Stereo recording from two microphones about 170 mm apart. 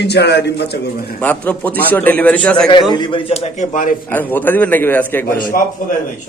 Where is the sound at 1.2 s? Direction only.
10° left (ahead or behind).